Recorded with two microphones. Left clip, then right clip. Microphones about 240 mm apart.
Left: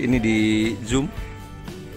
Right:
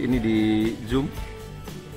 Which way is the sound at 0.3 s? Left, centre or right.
Left.